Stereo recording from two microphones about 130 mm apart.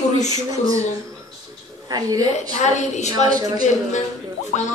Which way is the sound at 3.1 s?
30° right (ahead or behind).